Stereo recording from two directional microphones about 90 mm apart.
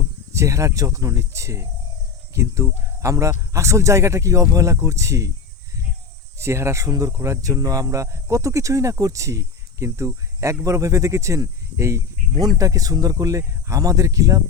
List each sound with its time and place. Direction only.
0.3 s speech: 35° right (ahead or behind)
6.4 s speech: 30° right (ahead or behind)
12.4 s speech: 45° right (ahead or behind)